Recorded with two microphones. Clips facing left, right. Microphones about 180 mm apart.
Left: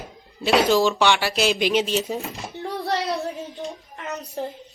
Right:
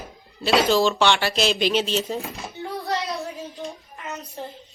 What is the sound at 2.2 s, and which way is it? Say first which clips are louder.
Speech: even; centre (ahead or behind).